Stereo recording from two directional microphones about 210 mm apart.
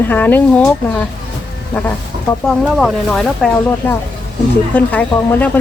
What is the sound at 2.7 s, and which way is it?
Speech, centre (ahead or behind).